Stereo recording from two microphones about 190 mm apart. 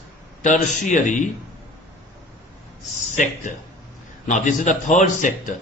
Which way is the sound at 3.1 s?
40° left (ahead or behind).